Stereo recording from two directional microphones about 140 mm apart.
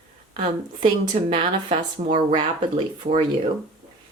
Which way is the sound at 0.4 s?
40° right (ahead or behind).